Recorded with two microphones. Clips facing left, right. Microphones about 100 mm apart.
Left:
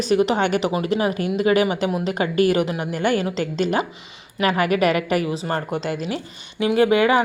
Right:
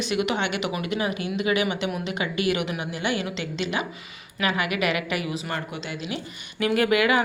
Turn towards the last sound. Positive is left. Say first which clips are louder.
# left 5 dB
turn(degrees=30)  # may be behind; listen again after turning